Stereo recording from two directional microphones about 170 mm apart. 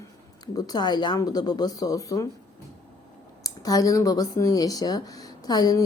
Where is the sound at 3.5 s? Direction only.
20° left (ahead or behind).